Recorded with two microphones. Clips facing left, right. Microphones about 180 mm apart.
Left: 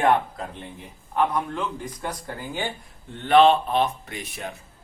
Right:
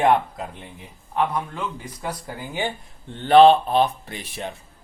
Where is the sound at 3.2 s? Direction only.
35° right (ahead or behind).